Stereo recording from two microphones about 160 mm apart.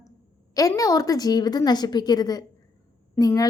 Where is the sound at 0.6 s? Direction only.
20° left (ahead or behind).